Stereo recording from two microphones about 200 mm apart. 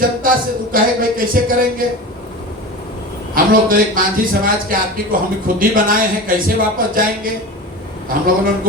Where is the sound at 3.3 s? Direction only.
45° right (ahead or behind).